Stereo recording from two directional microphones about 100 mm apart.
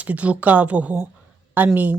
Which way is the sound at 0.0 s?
15° right (ahead or behind).